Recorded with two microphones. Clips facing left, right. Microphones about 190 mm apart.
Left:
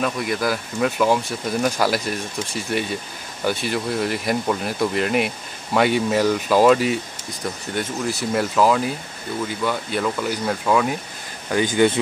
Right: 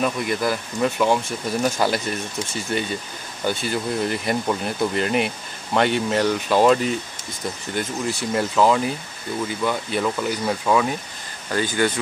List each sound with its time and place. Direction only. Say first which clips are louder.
0.0 s speech: even; centre (ahead or behind)
11.5 s speech: left 4 dB; 15° left (ahead or behind)